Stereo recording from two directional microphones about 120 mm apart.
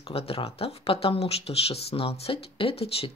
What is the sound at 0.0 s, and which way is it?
Speech, 55° left (ahead or behind).